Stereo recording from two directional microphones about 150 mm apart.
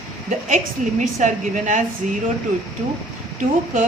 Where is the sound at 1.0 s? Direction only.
55° right (ahead or behind).